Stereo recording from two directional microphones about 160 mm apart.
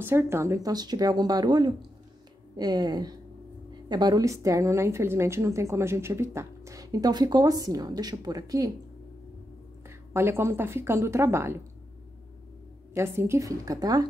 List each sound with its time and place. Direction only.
0.0 s a woman's voice: 15° right (ahead or behind)
9.8 s speech: 15° right (ahead or behind)
12.9 s a woman's voice: 15° right (ahead or behind)